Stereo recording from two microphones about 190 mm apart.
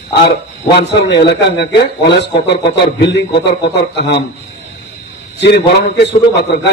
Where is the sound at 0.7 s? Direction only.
65° left (ahead or behind).